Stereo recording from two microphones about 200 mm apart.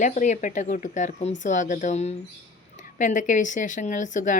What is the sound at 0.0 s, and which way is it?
Speech, 40° left (ahead or behind).